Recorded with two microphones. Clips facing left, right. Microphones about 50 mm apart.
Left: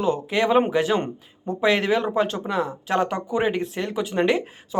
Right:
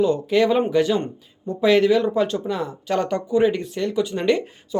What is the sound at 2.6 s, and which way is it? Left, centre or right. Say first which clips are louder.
Speech: left 5 dB; centre.